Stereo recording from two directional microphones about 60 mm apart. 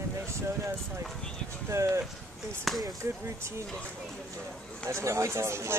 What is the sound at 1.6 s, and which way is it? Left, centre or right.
Speech, right.